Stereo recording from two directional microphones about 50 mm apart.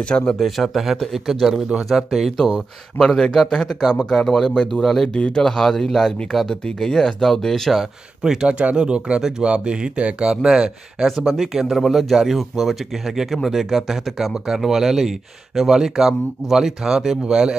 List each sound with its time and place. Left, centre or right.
0.0 s speech: centre
0.4 s speech: centre
2.3 s speech: centre
5.1 s speech: centre
8.2 s speech: centre
11.1 s speech: centre